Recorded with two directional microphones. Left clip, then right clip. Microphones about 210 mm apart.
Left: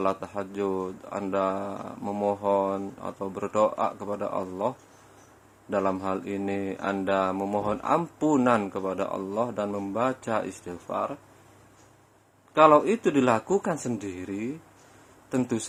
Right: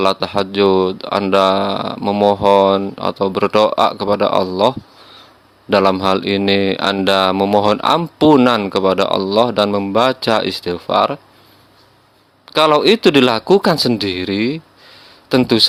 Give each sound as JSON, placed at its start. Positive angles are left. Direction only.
{"t": 0.0, "sound": "speech", "side_deg": -50}
{"t": 5.7, "sound": "speech", "side_deg": -50}
{"t": 12.5, "sound": "speech", "side_deg": -55}